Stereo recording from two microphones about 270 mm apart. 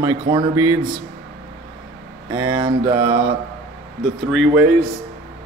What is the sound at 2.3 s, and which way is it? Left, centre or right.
Speech, centre.